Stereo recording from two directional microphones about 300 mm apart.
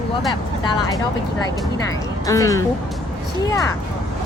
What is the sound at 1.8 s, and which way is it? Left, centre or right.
Speech, centre.